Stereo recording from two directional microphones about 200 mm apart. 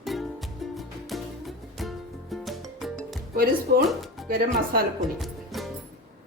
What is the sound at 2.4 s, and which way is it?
Music, centre (ahead or behind).